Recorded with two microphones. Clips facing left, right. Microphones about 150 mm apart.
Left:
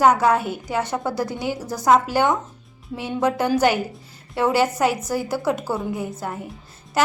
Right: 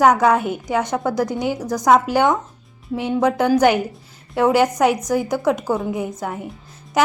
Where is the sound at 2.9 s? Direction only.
15° right (ahead or behind).